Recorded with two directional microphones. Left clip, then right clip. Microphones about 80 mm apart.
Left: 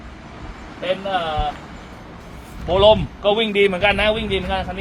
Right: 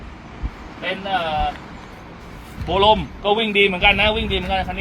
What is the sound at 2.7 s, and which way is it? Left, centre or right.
Speech, left.